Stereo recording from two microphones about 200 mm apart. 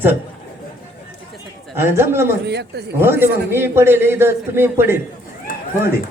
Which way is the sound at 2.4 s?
55° right (ahead or behind).